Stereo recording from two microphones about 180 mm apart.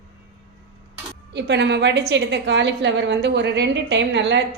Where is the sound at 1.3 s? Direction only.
70° right (ahead or behind).